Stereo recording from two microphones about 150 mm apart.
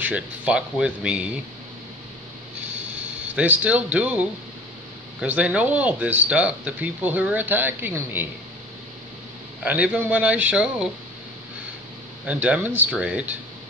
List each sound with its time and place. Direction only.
0.0 s speech: 10° right (ahead or behind)
3.3 s speech: 10° right (ahead or behind)
9.6 s speech: 10° right (ahead or behind)
12.3 s speech: 10° right (ahead or behind)